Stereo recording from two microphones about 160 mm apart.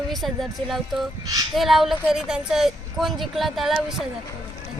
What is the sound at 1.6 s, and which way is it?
Speech, centre (ahead or behind).